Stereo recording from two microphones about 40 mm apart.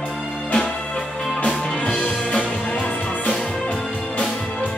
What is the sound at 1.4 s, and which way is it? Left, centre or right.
Music, left.